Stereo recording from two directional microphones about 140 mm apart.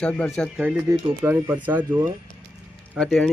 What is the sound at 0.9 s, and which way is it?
Speech, 20° right (ahead or behind).